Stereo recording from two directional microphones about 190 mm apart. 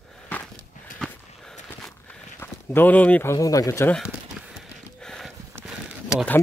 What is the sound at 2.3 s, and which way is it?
Speech, 10° left (ahead or behind).